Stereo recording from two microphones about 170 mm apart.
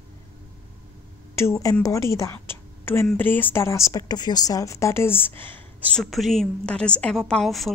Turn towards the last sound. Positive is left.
turn(degrees=0)  # may be behind; listen again after turning